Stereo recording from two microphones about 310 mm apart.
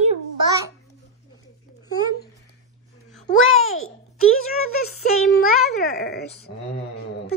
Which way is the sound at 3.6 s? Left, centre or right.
Left.